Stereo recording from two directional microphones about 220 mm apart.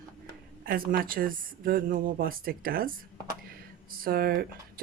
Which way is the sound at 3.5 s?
40° right (ahead or behind).